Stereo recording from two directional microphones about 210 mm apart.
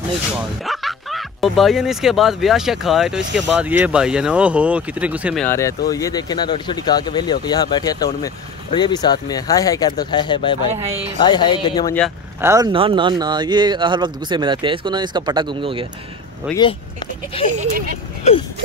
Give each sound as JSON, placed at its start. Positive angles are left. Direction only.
{"t": 0.7, "sound": "speech", "side_deg": 0}
{"t": 5.4, "sound": "speech", "side_deg": 15}
{"t": 12.4, "sound": "speech", "side_deg": -15}
{"t": 16.5, "sound": "speech", "side_deg": -5}
{"t": 17.3, "sound": "speech", "side_deg": 25}